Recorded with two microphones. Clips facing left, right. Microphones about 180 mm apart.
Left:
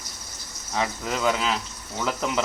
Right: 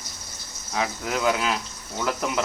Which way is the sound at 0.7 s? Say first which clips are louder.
Even; 5° right (ahead or behind).